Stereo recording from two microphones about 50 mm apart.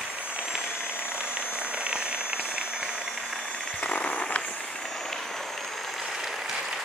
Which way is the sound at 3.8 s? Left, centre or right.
Left.